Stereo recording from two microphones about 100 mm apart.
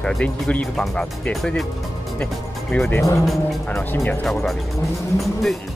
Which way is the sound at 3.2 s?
Centre (ahead or behind).